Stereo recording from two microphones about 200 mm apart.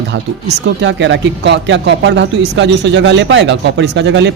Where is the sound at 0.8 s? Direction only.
65° right (ahead or behind).